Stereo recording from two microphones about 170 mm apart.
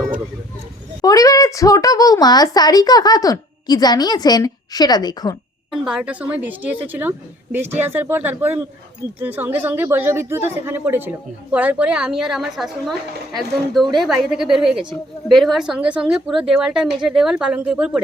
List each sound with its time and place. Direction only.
1.0 s speech: 20° left (ahead or behind)
5.7 s a woman's voice: 5° right (ahead or behind)